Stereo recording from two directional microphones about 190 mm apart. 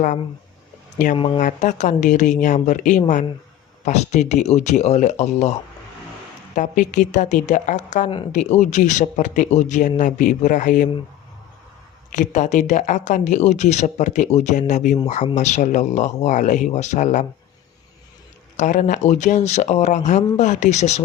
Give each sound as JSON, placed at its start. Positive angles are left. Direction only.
{"t": 1.1, "sound": "speech", "side_deg": 25}
{"t": 1.4, "sound": "speech", "side_deg": 40}
{"t": 6.6, "sound": "speech", "side_deg": 40}
{"t": 12.1, "sound": "speech", "side_deg": 40}
{"t": 18.5, "sound": "speech", "side_deg": 40}